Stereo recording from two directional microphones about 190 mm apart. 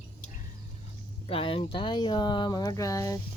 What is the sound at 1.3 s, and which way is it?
Speech, 30° left (ahead or behind).